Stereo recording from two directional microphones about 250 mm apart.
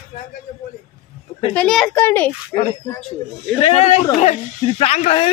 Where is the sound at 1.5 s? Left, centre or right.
Centre.